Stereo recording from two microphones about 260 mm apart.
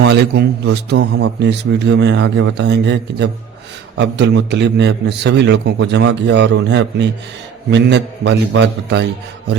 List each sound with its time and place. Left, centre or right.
0.0 s a man's voice: right